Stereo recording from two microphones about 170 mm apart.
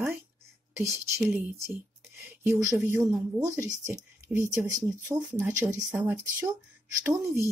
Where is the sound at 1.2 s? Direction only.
10° right (ahead or behind).